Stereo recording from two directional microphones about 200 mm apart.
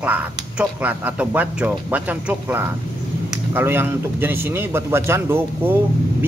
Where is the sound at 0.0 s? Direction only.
5° right (ahead or behind).